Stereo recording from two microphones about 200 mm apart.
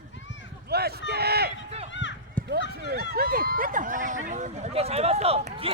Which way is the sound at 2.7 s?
50° right (ahead or behind).